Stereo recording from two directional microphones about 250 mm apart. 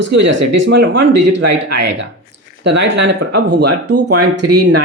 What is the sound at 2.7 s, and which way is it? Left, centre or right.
Speech, right.